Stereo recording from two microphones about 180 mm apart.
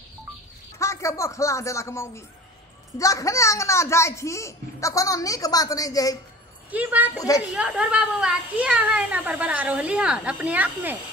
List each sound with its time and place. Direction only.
0.7 s a child's voice: 15° left (ahead or behind)
6.7 s speech: 10° right (ahead or behind)
7.2 s a woman's voice: 20° left (ahead or behind)
7.5 s speech: 5° right (ahead or behind)